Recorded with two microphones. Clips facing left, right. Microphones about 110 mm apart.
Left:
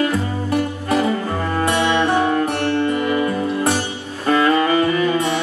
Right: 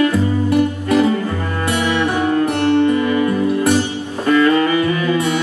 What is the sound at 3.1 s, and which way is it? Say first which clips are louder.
Music: right 3 dB; 30° left (ahead or behind).